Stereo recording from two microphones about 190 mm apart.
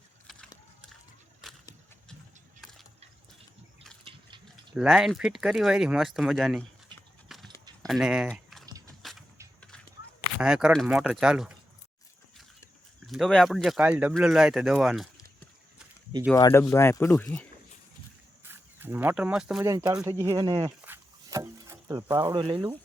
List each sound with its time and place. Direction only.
4.7 s speech: centre (ahead or behind)
6.9 s clip-clop: 25° right (ahead or behind)
7.3 s horse: centre (ahead or behind)
7.6 s keys jangling: 20° right (ahead or behind)
7.9 s speech: centre (ahead or behind)
9.0 s a sound: centre (ahead or behind)
10.4 s speech: 5° right (ahead or behind)
13.1 s speech: centre (ahead or behind)
16.3 s speech: 10° left (ahead or behind)
18.4 s speech: 10° right (ahead or behind)
19.6 s speech: 20° right (ahead or behind)